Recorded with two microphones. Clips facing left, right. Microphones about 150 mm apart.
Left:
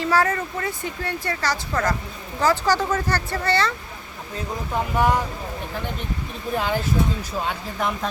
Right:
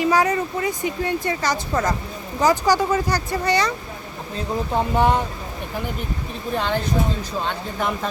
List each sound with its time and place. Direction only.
0.0 s speech: 15° right (ahead or behind)
4.7 s speech: 25° right (ahead or behind)
6.5 s speech: 5° left (ahead or behind)